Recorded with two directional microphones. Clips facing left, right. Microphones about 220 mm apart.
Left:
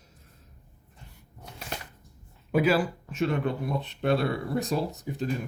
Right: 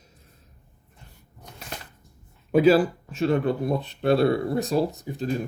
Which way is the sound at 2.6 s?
35° right (ahead or behind).